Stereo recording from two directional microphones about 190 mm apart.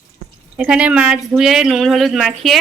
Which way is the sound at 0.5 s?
5° right (ahead or behind).